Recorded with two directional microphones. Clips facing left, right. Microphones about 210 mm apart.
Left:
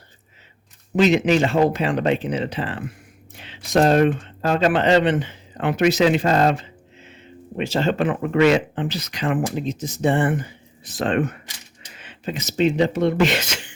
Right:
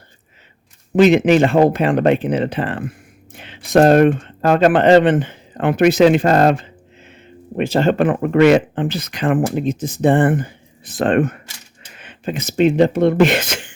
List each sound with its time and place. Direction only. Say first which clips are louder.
0.9 s speech: right 5 dB; 55° right (ahead or behind)